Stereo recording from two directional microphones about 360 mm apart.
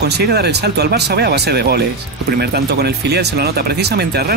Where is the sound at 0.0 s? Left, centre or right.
Right.